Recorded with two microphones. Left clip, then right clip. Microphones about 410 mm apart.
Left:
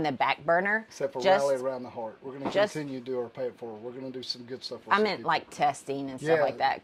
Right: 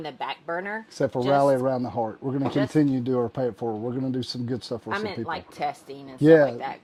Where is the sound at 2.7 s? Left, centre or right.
Right.